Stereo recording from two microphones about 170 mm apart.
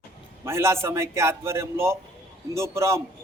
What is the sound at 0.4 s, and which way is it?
A man's voice, 15° right (ahead or behind).